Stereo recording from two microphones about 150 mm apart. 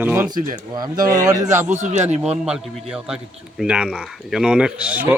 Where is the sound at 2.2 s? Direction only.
5° right (ahead or behind).